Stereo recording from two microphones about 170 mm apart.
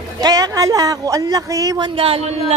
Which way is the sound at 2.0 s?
35° right (ahead or behind).